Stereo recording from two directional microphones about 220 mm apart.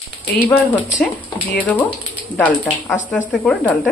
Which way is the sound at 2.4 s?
5° left (ahead or behind).